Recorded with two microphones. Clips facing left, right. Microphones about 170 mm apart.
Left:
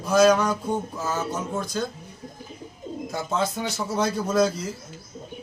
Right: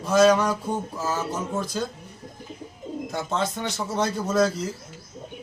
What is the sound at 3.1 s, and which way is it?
Speech, 5° left (ahead or behind).